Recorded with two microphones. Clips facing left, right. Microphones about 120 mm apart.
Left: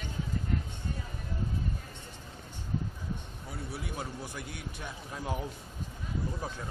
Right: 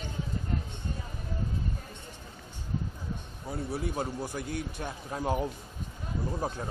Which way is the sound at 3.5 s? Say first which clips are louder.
Right 7 dB; 40° right (ahead or behind).